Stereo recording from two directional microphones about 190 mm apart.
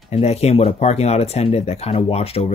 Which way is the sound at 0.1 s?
35° left (ahead or behind).